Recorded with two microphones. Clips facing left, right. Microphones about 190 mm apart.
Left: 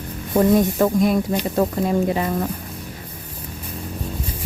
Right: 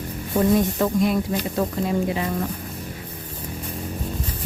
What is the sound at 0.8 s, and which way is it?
Speech, 45° left (ahead or behind).